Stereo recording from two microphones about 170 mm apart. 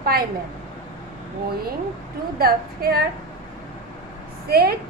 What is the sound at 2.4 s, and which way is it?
Speech, 65° right (ahead or behind).